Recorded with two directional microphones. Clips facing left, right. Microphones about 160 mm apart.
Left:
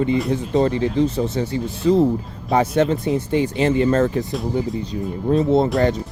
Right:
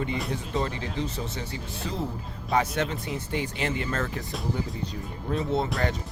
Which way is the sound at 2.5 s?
35° left (ahead or behind).